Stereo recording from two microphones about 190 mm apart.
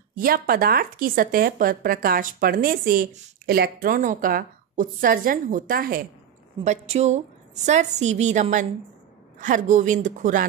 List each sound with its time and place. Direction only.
0.1 s speech: 50° right (ahead or behind)
6.6 s a woman's voice: 35° right (ahead or behind)